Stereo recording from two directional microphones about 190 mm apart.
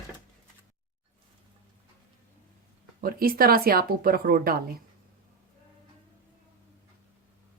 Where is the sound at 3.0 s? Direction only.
50° right (ahead or behind).